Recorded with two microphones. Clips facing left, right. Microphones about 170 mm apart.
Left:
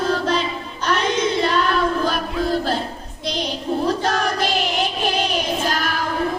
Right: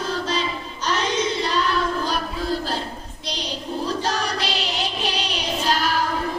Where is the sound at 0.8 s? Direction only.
55° left (ahead or behind).